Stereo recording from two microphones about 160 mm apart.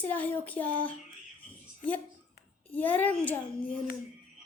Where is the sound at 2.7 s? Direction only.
10° left (ahead or behind).